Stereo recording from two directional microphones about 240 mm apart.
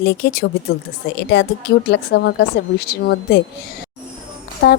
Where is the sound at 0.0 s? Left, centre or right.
Left.